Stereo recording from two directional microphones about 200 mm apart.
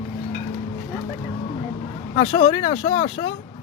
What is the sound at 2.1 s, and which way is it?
Speech, 25° left (ahead or behind).